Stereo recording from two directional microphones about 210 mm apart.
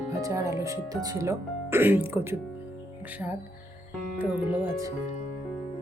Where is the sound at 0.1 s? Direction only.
15° right (ahead or behind).